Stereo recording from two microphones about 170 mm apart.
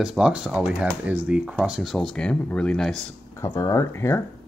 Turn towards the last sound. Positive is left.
turn(degrees=15)  # may be behind; listen again after turning